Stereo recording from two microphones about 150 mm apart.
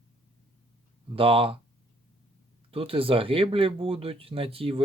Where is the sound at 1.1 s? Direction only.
35° right (ahead or behind).